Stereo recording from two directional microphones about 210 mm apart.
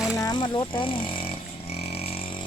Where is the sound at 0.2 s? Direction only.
20° left (ahead or behind).